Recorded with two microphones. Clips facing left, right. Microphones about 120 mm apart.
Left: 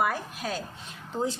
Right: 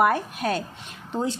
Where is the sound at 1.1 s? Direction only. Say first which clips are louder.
Right 3 dB; 70° right (ahead or behind).